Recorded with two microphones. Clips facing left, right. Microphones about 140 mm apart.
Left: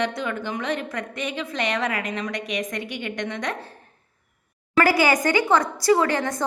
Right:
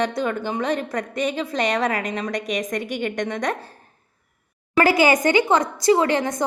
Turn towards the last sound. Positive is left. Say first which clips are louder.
# right 2 dB
turn(degrees=-20)  # may be behind; listen again after turning